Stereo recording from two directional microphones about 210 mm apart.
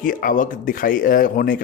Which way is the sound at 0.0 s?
40° left (ahead or behind).